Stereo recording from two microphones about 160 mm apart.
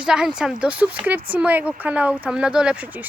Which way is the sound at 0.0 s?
5° right (ahead or behind).